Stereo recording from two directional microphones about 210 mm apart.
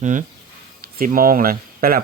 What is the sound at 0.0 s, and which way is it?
Speech, 35° right (ahead or behind).